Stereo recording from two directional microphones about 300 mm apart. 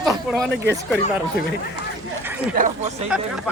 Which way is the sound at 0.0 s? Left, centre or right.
Centre.